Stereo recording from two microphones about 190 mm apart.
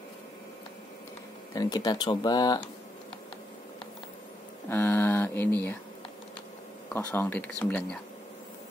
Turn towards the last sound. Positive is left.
turn(degrees=10)  # may be behind; listen again after turning